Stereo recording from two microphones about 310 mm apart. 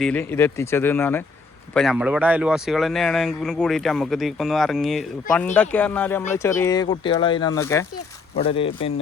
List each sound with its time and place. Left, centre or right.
0.0 s speech: centre